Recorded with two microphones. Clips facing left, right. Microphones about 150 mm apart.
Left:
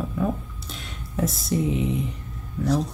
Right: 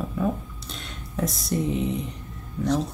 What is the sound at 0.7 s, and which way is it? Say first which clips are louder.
Speech: left 2 dB; centre (ahead or behind).